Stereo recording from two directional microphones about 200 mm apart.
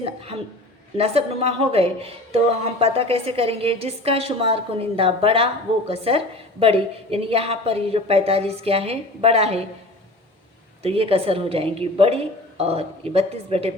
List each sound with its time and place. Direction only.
0.0 s a sound: 30° right (ahead or behind)
0.9 s a woman's voice: 30° right (ahead or behind)
10.8 s a woman's voice: 30° right (ahead or behind)